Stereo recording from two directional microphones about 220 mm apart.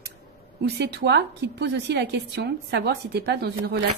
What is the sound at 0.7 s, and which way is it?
A woman's voice, 50° right (ahead or behind).